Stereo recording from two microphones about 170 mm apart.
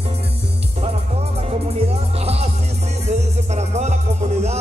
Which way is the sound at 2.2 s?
35° right (ahead or behind).